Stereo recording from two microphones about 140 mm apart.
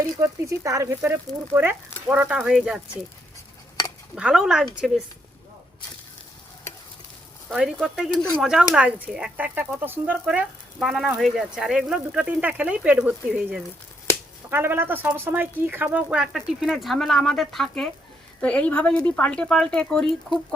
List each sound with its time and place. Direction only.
0.0 s a woman's voice: 20° right (ahead or behind); by 3.0 s 5° right (ahead or behind)
4.1 s speech: 5° right (ahead or behind)
7.5 s a woman's voice: 5° right (ahead or behind)